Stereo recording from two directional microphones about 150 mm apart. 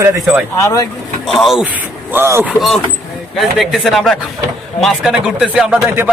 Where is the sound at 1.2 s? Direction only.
Centre (ahead or behind); by 2.5 s 15° right (ahead or behind).